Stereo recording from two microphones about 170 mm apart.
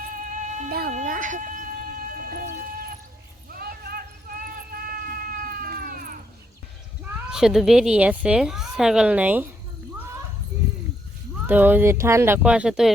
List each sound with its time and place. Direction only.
0.7 s speech: 65° right (ahead or behind)
0.9 s speech: 50° right (ahead or behind)
3.5 s a sound: 60° right (ahead or behind)
7.3 s a woman's voice: 5° right (ahead or behind)
11.4 s speech: 10° right (ahead or behind)